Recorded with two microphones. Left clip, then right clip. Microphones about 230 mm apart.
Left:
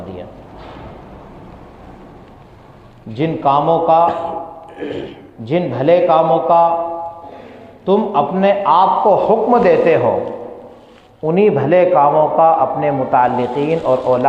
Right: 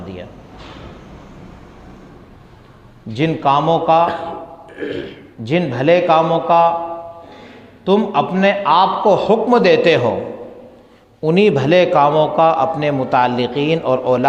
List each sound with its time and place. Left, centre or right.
3.2 s a man's voice: right
4.8 s speech: centre
5.5 s a man's voice: right
7.9 s a man's voice: right
11.2 s a man's voice: right